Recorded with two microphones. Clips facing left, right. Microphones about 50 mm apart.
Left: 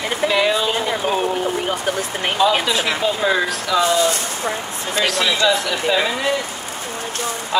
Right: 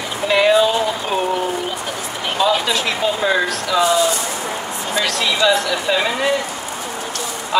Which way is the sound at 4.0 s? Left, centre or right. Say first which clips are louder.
Right 1 dB; left.